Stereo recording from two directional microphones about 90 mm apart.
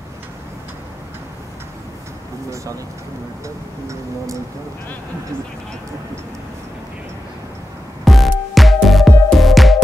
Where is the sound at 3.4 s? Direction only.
35° right (ahead or behind).